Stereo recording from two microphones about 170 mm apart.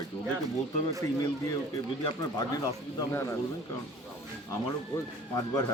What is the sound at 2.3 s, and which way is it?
Speech, 20° left (ahead or behind).